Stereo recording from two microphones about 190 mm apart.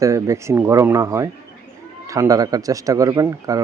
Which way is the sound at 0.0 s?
15° right (ahead or behind).